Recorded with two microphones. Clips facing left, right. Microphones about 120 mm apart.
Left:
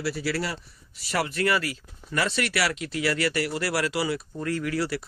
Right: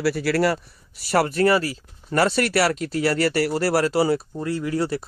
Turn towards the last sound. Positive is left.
turn(degrees=-25)  # may be behind; listen again after turning